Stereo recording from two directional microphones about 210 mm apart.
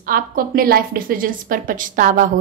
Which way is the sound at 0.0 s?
45° right (ahead or behind).